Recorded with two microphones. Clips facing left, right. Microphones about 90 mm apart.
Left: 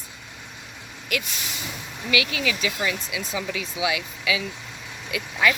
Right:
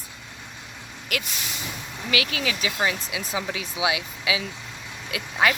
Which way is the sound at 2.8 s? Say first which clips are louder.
Right 1 dB; 25° right (ahead or behind).